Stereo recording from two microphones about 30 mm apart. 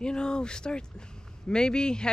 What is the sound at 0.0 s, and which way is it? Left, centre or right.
A woman's voice, left.